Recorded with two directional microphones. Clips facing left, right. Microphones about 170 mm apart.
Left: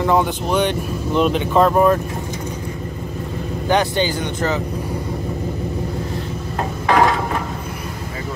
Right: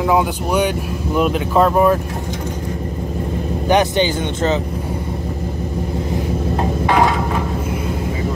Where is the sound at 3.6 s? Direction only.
20° right (ahead or behind).